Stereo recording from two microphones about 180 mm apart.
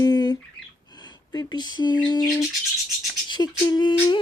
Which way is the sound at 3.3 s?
25° left (ahead or behind).